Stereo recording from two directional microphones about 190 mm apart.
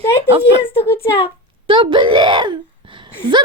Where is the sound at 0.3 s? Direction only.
30° right (ahead or behind).